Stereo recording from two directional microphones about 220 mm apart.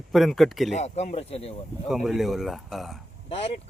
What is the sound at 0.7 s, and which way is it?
Speech, 30° left (ahead or behind).